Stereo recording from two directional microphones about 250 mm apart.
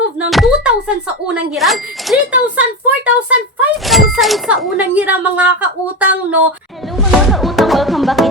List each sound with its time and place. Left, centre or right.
0.2 s speech: centre
3.2 s a sound: centre
6.9 s music: centre